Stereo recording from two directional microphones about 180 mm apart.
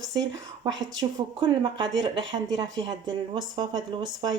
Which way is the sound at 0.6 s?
25° right (ahead or behind).